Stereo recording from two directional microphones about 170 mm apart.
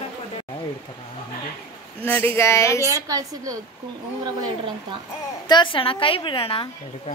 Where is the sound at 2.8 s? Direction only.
20° right (ahead or behind).